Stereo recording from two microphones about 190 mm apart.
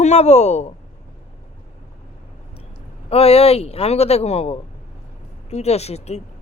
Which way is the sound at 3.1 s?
30° left (ahead or behind).